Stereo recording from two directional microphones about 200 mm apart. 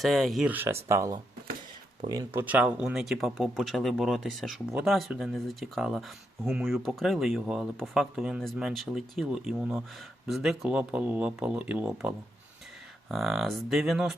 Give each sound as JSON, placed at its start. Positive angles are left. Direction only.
{"t": 0.0, "sound": "speech", "side_deg": 0}